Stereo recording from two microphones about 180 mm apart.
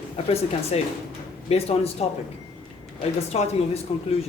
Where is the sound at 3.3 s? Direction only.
35° left (ahead or behind).